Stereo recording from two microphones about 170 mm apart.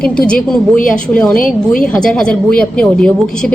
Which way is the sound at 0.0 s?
5° left (ahead or behind).